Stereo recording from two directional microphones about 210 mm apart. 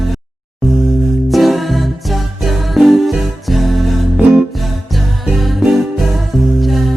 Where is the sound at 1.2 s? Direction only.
Centre (ahead or behind).